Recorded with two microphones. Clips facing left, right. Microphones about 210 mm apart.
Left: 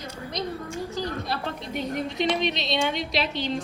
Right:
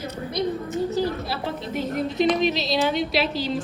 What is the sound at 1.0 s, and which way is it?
A woman's voice, 5° right (ahead or behind).